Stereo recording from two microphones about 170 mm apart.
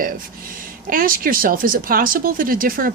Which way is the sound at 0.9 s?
55° right (ahead or behind).